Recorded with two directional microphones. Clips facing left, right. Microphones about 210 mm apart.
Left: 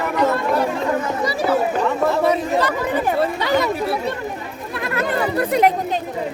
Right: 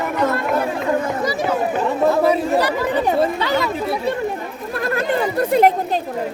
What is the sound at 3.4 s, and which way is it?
Speech, 15° left (ahead or behind).